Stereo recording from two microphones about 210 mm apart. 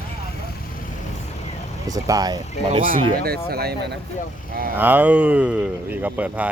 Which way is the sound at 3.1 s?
45° right (ahead or behind).